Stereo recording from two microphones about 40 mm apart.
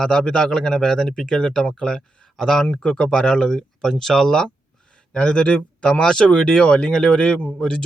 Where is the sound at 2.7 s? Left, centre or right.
Left.